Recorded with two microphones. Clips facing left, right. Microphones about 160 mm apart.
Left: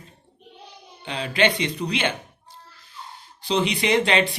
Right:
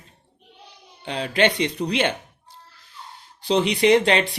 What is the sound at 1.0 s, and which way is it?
Speech, 45° right (ahead or behind).